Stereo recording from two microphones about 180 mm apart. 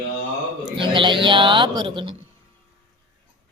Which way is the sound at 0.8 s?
25° right (ahead or behind).